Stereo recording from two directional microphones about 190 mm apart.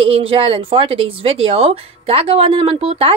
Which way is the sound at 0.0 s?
30° right (ahead or behind).